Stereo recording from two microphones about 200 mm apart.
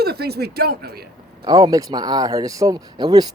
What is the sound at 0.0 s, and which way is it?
Speech, 55° right (ahead or behind).